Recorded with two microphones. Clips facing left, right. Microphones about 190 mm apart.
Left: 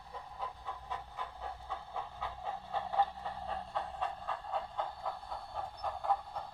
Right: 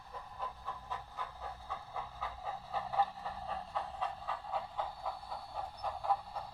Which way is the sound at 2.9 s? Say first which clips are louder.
Left 1 dB; 5° right (ahead or behind).